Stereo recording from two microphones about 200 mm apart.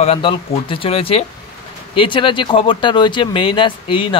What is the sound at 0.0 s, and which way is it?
Speech, 25° left (ahead or behind).